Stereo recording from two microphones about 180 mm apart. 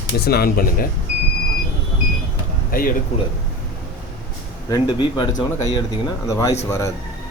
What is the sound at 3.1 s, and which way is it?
Speech, 40° left (ahead or behind).